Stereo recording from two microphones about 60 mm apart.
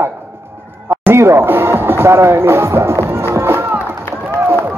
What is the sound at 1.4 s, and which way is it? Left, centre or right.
Music, right.